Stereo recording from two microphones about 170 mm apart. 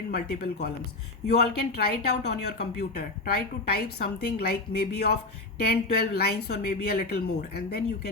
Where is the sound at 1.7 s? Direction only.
75° left (ahead or behind).